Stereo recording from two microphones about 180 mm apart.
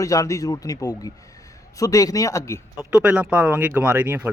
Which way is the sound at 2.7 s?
10° right (ahead or behind).